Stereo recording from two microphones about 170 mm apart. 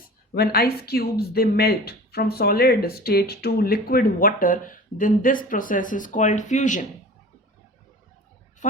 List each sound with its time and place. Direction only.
0.0 s speech: 60° left (ahead or behind); by 6.8 s 45° left (ahead or behind)